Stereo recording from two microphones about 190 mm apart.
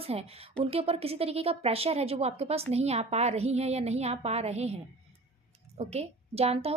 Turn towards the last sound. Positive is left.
turn(degrees=-30)  # may be behind; listen again after turning